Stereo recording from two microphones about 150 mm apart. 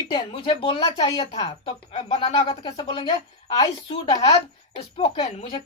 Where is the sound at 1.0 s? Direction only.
25° left (ahead or behind).